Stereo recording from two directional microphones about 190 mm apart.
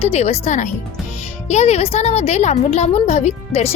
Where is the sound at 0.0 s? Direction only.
35° left (ahead or behind).